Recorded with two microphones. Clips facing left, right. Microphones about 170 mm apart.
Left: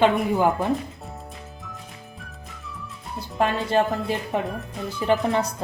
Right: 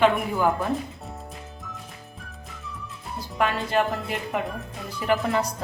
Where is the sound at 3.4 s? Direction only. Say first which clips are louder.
Left 2 dB; 30° left (ahead or behind).